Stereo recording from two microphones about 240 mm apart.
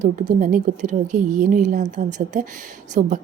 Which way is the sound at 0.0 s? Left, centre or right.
Right.